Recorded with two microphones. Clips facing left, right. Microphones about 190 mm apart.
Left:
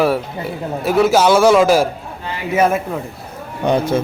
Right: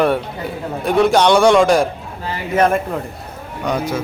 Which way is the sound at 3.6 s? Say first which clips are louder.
Left 4 dB; 25° left (ahead or behind).